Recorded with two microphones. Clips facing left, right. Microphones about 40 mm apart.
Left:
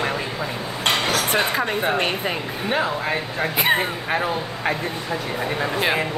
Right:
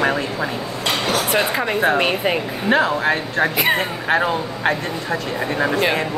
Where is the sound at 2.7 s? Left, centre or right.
Right.